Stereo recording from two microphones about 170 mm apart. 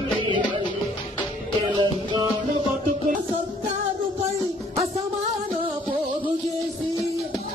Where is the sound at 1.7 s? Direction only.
25° right (ahead or behind).